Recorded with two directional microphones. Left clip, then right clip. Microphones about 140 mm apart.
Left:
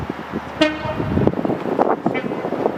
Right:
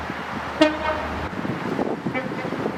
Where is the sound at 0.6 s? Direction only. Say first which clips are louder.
Left 1 dB; centre (ahead or behind).